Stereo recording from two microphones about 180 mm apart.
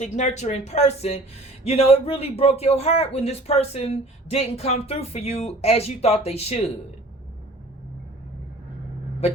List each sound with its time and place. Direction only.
0.0 s a man's voice: 40° left (ahead or behind)